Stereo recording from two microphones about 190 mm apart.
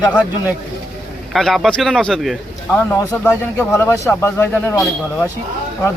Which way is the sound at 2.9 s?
15° left (ahead or behind).